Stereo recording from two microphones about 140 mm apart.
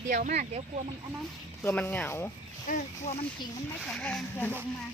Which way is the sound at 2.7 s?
65° left (ahead or behind).